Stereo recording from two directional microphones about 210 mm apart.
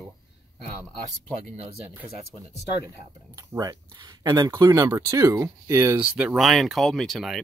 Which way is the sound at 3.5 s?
15° right (ahead or behind).